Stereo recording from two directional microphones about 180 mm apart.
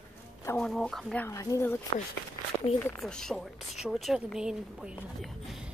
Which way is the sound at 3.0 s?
5° left (ahead or behind).